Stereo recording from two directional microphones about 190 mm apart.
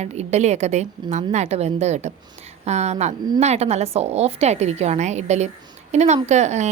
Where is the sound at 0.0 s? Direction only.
35° right (ahead or behind).